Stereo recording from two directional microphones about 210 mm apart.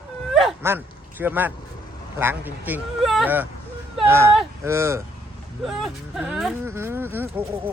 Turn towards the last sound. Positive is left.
turn(degrees=-10)  # may be behind; listen again after turning